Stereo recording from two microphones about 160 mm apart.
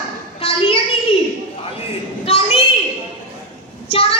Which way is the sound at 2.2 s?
40° left (ahead or behind).